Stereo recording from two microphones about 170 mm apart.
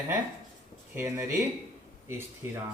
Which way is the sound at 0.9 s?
15° right (ahead or behind).